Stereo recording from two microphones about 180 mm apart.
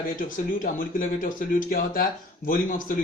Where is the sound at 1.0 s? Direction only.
50° left (ahead or behind).